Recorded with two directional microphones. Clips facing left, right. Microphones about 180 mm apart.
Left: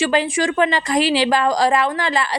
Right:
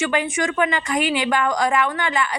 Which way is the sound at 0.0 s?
30° left (ahead or behind).